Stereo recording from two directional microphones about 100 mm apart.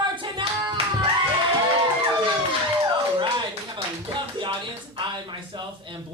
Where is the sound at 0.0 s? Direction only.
55° right (ahead or behind).